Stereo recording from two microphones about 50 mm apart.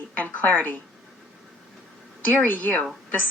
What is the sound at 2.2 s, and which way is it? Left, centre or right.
Speech, left.